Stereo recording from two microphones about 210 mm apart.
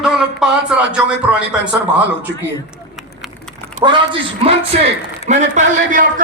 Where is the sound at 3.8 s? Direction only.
25° right (ahead or behind).